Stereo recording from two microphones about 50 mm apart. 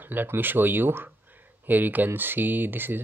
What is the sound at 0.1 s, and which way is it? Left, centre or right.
Speech, right.